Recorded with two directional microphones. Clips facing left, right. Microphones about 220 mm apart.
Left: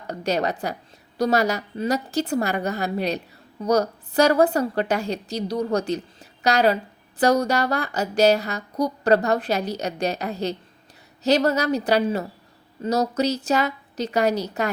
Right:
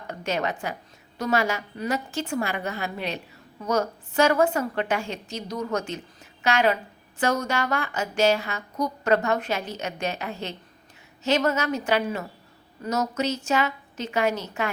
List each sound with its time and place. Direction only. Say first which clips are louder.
0.1 s a woman's voice: left 4 dB; 35° left (ahead or behind)